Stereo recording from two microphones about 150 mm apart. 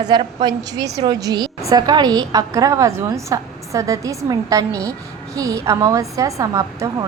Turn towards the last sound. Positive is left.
turn(degrees=-25)  # may be behind; listen again after turning